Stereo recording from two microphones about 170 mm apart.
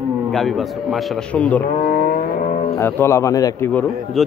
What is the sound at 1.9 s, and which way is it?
Vehicle, 60° left (ahead or behind).